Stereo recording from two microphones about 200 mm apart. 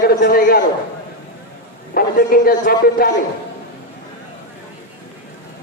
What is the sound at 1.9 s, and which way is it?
A man's voice, 45° left (ahead or behind).